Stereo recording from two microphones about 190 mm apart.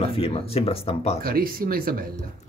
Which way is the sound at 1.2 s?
50° right (ahead or behind).